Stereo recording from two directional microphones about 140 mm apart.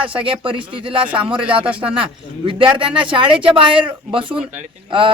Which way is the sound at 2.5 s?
40° right (ahead or behind).